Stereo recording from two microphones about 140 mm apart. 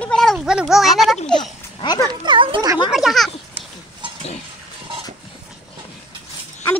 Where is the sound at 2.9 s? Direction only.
Centre (ahead or behind).